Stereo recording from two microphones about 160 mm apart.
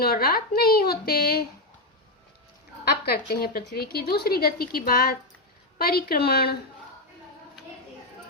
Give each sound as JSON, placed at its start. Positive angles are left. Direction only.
{"t": 0.0, "sound": "a woman's voice", "side_deg": 70}
{"t": 2.8, "sound": "a woman's voice", "side_deg": 80}